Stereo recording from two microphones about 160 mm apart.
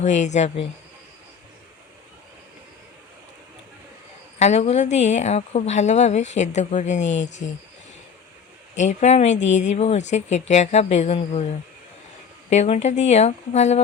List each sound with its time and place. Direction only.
0.0 s a woman's voice: 45° left (ahead or behind)
4.4 s a woman's voice: 45° left (ahead or behind)
8.7 s a woman's voice: 50° left (ahead or behind)